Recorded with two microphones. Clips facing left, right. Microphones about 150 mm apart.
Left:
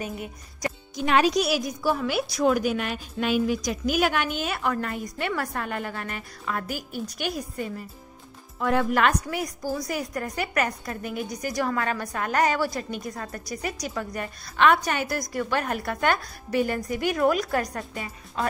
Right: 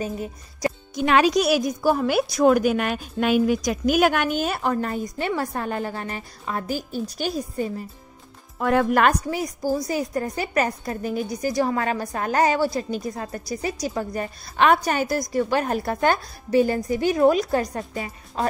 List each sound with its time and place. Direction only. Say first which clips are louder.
0.0 s a woman's voice: right 5 dB; 30° right (ahead or behind)
1.0 s speech: right 3 dB; 90° right
1.3 s a woman's voice: right 4 dB; 50° right (ahead or behind); by 7.7 s 30° right (ahead or behind)
8.5 s speech: right 4 dB; 50° right (ahead or behind)
9.3 s a woman's voice: right 5 dB; 25° right (ahead or behind)